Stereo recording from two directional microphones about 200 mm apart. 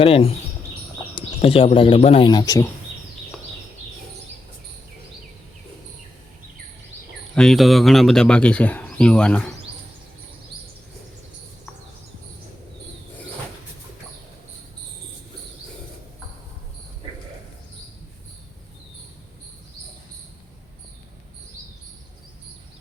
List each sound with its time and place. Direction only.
0.0 s speech: 30° left (ahead or behind)
7.3 s speech: centre (ahead or behind)